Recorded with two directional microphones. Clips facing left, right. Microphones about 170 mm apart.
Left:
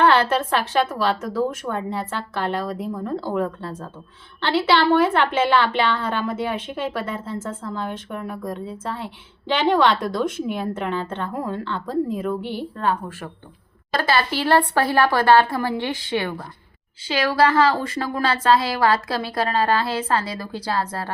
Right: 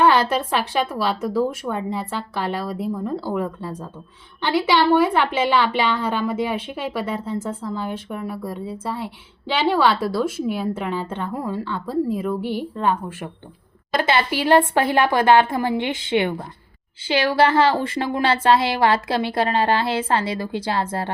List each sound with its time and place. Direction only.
0.0 s a woman's voice: 10° right (ahead or behind)